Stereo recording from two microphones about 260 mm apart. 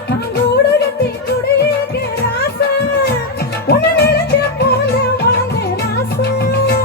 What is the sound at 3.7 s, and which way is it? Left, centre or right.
Music, left.